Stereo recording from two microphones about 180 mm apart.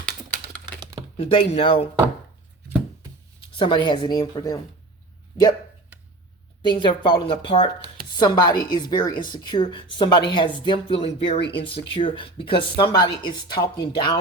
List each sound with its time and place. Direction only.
1.1 s speech: 30° left (ahead or behind)
3.5 s speech: 25° left (ahead or behind)
6.6 s speech: 25° left (ahead or behind)